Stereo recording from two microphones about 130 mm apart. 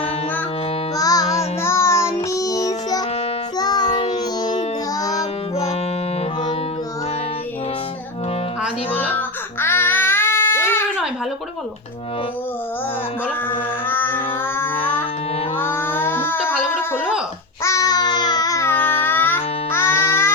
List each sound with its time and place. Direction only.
0.9 s music: 30° left (ahead or behind)
8.9 s baby cry: 15° left (ahead or behind)
13.5 s a sound: 15° left (ahead or behind)
15.5 s child singing: 15° left (ahead or behind)
17.6 s babbling: 25° left (ahead or behind)